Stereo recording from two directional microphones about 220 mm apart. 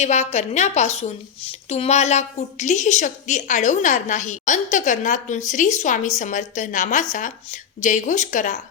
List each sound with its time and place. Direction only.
0.0 s a woman's voice: 30° left (ahead or behind)